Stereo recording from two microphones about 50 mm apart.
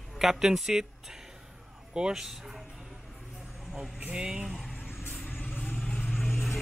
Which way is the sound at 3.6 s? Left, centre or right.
Centre.